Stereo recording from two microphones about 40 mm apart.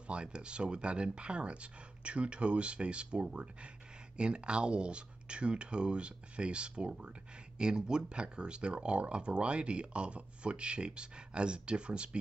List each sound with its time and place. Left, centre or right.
0.0 s speech: right